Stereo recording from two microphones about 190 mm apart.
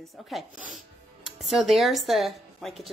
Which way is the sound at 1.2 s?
Centre (ahead or behind).